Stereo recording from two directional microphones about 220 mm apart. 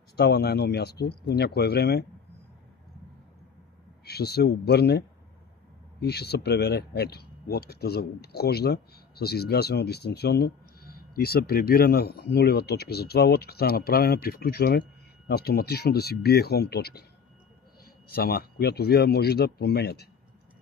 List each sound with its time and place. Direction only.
0.2 s speech: 50° left (ahead or behind)
4.0 s speech: 45° left (ahead or behind)
18.1 s speech: 45° left (ahead or behind)